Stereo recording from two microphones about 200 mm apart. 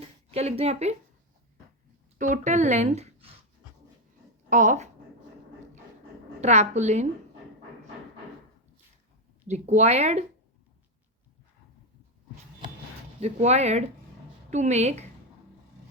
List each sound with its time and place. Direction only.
0.0 s speech: 30° right (ahead or behind)
2.1 s speech: 40° right (ahead or behind)
4.4 s a woman's voice: 40° right (ahead or behind)
6.4 s speech: 35° right (ahead or behind)
9.5 s speech: 35° right (ahead or behind)
13.1 s speech: 30° right (ahead or behind)